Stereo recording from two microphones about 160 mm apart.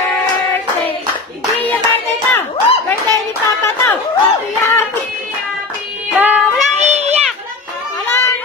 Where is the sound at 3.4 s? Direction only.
20° left (ahead or behind).